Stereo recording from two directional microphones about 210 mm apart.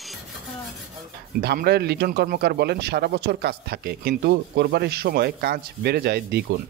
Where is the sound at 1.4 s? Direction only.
50° right (ahead or behind).